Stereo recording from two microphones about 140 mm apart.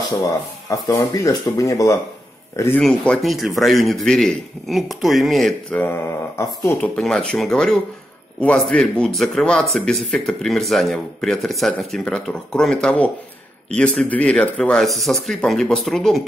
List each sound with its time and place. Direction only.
0.9 s speech: 25° left (ahead or behind)
2.8 s speech: 5° left (ahead or behind)
7.0 s speech: 5° left (ahead or behind)